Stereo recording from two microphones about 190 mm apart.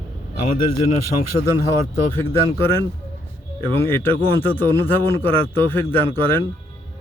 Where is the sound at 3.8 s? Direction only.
10° left (ahead or behind).